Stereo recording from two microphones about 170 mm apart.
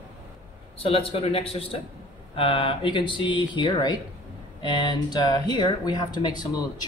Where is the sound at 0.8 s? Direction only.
35° left (ahead or behind).